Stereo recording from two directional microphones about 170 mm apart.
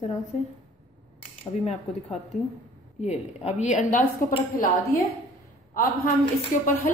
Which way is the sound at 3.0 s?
45° left (ahead or behind).